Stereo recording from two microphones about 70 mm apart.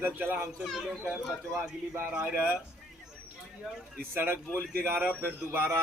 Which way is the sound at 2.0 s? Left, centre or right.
Right.